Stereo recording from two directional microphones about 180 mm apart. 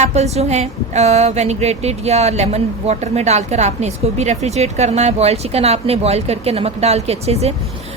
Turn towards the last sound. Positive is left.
turn(degrees=-35)  # may be behind; listen again after turning